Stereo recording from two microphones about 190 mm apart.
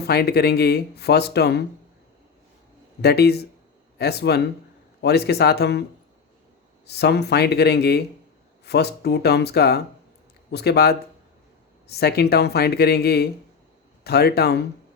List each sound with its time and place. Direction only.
0.0 s speech: 55° left (ahead or behind)
3.0 s speech: 60° left (ahead or behind)
6.8 s speech: 60° left (ahead or behind)